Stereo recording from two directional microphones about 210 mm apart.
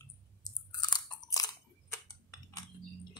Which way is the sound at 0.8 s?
20° left (ahead or behind).